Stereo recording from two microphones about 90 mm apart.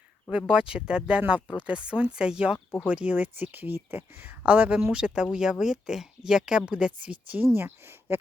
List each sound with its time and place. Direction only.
0.3 s speech: 10° right (ahead or behind)